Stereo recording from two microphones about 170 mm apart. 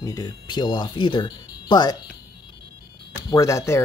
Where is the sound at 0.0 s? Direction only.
20° left (ahead or behind).